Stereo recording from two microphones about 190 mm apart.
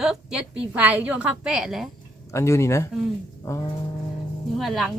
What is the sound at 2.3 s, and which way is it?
Speech, 15° left (ahead or behind).